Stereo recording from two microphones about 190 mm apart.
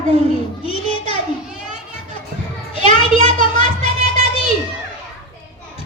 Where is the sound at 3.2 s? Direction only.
30° left (ahead or behind).